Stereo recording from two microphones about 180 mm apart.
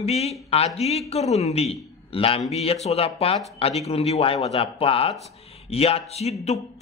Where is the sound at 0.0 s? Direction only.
35° left (ahead or behind).